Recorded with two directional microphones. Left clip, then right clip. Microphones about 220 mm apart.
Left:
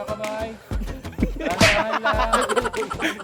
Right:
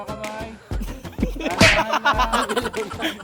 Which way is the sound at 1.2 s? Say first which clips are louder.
Even; 45° right (ahead or behind).